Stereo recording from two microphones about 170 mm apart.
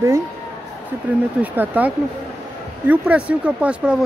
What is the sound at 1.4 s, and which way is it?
Speech, 10° right (ahead or behind).